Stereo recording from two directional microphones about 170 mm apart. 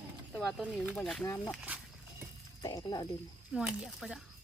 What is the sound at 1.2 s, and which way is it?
Speech, 15° left (ahead or behind).